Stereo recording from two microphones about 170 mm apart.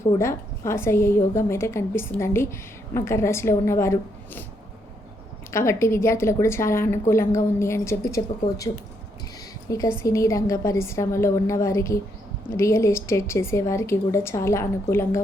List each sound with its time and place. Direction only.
0.0 s a woman's voice: 15° left (ahead or behind)
5.5 s a woman's voice: 15° left (ahead or behind)